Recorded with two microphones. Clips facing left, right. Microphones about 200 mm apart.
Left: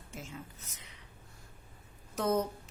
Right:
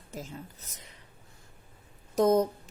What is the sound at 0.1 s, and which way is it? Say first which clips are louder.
Speech: right 4 dB; 35° right (ahead or behind).